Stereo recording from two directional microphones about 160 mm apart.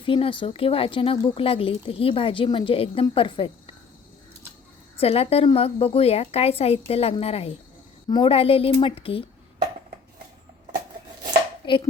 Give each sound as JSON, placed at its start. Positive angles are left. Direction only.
{"t": 0.0, "sound": "speech", "side_deg": 35}
{"t": 4.9, "sound": "speech", "side_deg": 40}
{"t": 11.6, "sound": "hands", "side_deg": 30}